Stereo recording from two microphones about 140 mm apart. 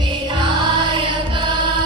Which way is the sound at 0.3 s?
35° right (ahead or behind).